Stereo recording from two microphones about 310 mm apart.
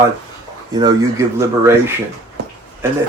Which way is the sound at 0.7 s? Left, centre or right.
Centre.